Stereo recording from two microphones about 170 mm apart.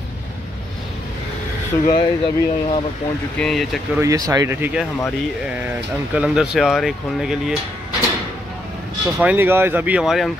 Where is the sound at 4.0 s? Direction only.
20° right (ahead or behind).